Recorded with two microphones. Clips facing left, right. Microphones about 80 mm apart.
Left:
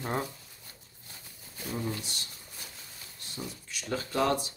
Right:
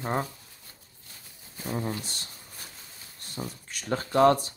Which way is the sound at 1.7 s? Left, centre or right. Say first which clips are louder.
Right 3 dB; right.